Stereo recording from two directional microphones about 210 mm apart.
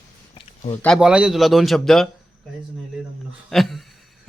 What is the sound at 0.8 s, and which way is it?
Speech, centre (ahead or behind).